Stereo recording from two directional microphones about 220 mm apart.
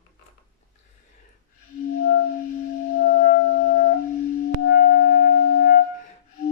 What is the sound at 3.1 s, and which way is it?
Music, 40° left (ahead or behind).